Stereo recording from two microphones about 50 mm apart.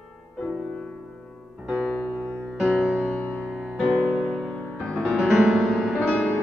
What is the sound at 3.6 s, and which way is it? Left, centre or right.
Music, centre.